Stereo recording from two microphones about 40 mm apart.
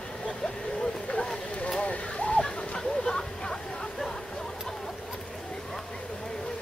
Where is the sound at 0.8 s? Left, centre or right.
Left.